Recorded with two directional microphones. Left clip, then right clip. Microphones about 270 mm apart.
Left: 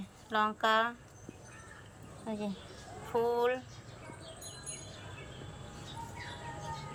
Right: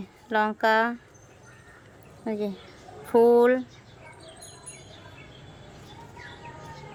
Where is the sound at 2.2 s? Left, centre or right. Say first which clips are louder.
Right 9 dB; centre.